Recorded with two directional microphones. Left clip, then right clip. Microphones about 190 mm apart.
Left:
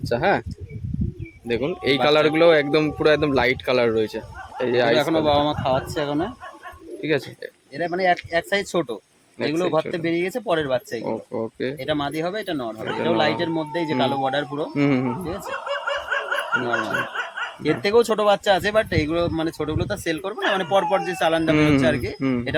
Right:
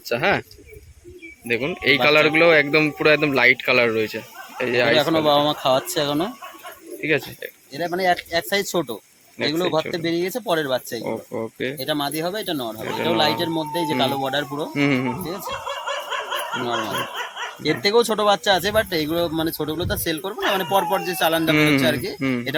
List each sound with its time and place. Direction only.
0.1 s speech: 5° left (ahead or behind)
1.5 s speech: 10° left (ahead or behind)
4.9 s speech: 5° right (ahead or behind)
7.0 s speech: 10° left (ahead or behind)
16.6 s speech: 15° left (ahead or behind)